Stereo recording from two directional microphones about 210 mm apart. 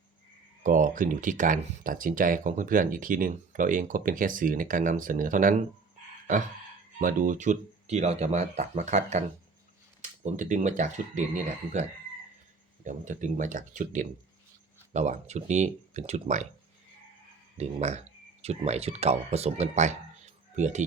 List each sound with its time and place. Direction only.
0.6 s speech: 40° right (ahead or behind)
7.0 s speech: 40° right (ahead or behind)
17.6 s speech: 30° right (ahead or behind)